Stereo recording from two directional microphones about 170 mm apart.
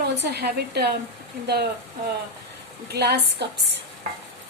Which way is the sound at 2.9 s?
75° right (ahead or behind).